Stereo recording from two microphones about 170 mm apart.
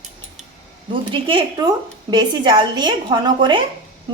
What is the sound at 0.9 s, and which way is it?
A woman's voice, 30° right (ahead or behind).